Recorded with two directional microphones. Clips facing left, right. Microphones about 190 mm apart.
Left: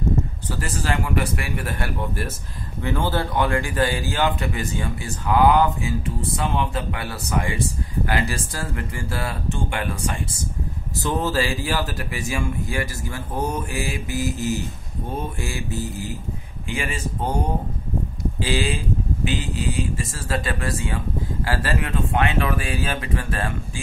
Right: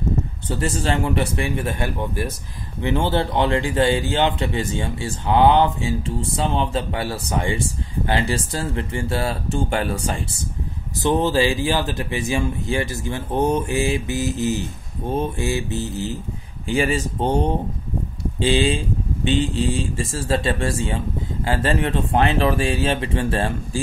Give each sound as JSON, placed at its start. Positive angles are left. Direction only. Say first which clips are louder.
{"t": 0.5, "sound": "speech", "louder": "right 7 dB", "side_deg": -25}
{"t": 11.0, "sound": "speech", "louder": "right 5 dB", "side_deg": -20}
{"t": 16.6, "sound": "speech", "louder": "right 7 dB", "side_deg": -35}
{"t": 18.4, "sound": "speech", "louder": "right 6 dB", "side_deg": -25}